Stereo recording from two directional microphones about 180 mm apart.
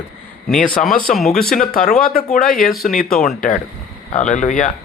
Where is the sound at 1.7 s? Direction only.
50° left (ahead or behind).